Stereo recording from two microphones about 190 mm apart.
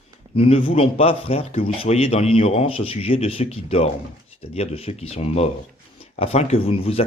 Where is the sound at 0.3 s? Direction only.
30° left (ahead or behind).